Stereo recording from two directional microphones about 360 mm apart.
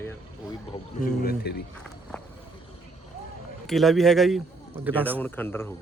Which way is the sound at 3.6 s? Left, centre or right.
Centre.